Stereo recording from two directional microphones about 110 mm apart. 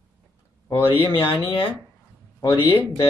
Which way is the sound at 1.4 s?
55° left (ahead or behind).